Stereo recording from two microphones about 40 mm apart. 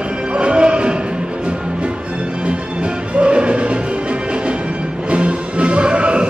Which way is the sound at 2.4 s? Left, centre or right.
Right.